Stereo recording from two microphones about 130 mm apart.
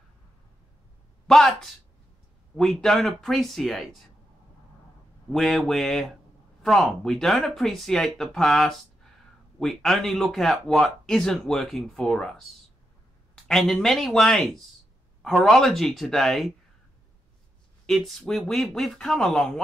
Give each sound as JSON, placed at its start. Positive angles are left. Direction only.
{"t": 1.2, "sound": "speech", "side_deg": 5}
{"t": 5.3, "sound": "speech", "side_deg": 0}
{"t": 13.5, "sound": "speech", "side_deg": 5}
{"t": 17.8, "sound": "speech", "side_deg": 0}